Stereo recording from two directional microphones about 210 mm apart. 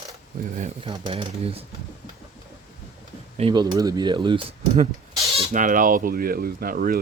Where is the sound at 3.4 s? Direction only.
20° right (ahead or behind); by 6.9 s 45° right (ahead or behind).